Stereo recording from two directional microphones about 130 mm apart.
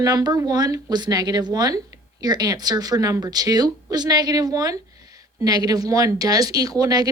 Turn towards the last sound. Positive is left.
turn(degrees=-30)  # may be behind; listen again after turning